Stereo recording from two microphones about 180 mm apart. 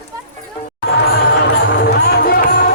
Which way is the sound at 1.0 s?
70° left (ahead or behind).